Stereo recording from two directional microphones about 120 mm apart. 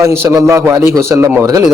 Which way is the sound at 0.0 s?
25° right (ahead or behind).